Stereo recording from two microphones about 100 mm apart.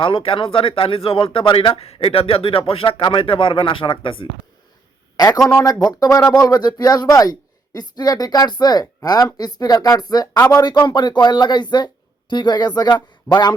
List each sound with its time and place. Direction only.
0.0 s speech: 65° left (ahead or behind)
5.1 s a man's voice: 40° left (ahead or behind)
5.5 s a man's voice: 25° left (ahead or behind); by 13.5 s 45° left (ahead or behind)